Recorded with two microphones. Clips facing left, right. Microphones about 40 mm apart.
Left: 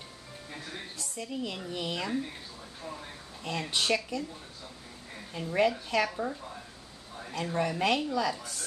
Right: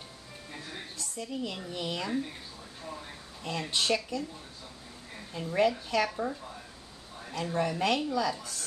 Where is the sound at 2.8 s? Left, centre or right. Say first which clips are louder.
Left 1 dB; centre.